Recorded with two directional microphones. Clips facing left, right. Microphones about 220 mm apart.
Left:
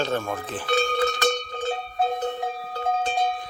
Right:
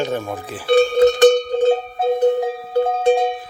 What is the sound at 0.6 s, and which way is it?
Cowbell, 35° right (ahead or behind).